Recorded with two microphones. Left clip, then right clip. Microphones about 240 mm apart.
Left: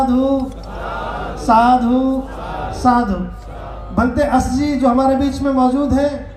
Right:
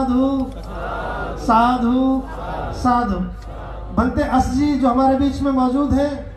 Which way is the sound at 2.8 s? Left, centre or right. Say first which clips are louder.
Left 3 dB; left.